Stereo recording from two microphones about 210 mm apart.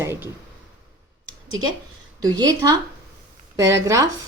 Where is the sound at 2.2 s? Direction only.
20° right (ahead or behind).